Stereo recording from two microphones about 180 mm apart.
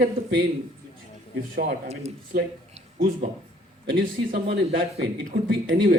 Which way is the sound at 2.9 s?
55° right (ahead or behind).